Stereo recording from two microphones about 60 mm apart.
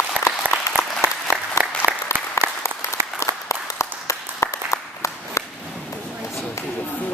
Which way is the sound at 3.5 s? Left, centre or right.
Left.